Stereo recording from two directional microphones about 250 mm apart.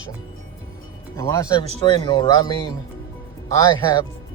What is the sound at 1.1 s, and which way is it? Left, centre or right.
Speech, centre.